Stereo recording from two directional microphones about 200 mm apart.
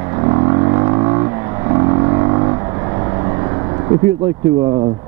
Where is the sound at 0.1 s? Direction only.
20° right (ahead or behind).